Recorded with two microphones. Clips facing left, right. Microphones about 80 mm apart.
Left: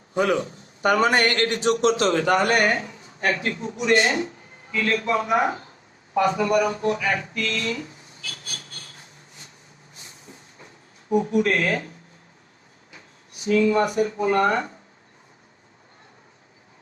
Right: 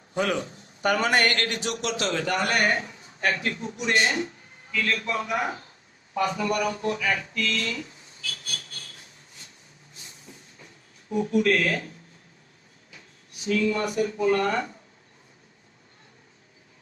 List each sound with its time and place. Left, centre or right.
0.1 s a man's voice: left
9.9 s a sound: left
11.1 s speech: left
13.5 s speech: left